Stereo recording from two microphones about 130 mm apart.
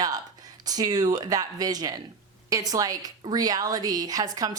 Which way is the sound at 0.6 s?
30° right (ahead or behind).